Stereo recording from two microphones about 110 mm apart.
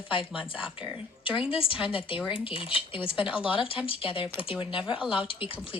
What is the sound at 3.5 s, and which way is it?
Speech, 55° left (ahead or behind).